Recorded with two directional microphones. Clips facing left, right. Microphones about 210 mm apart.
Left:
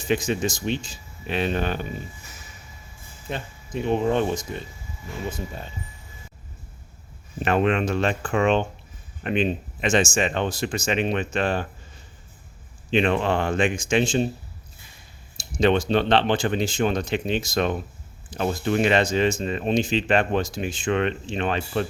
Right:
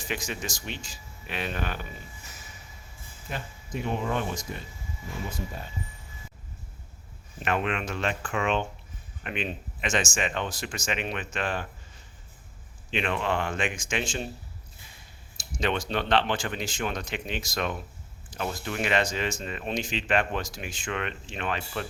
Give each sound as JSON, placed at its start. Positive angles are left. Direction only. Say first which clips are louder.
{"t": 0.0, "sound": "speech", "louder": "left 10 dB", "side_deg": 25}
{"t": 3.8, "sound": "speech", "louder": "left 8 dB", "side_deg": 25}
{"t": 7.4, "sound": "speech", "louder": "left 7 dB", "side_deg": 35}
{"t": 12.9, "sound": "speech", "louder": "left 7 dB", "side_deg": 35}
{"t": 15.5, "sound": "speech", "louder": "left 9 dB", "side_deg": 30}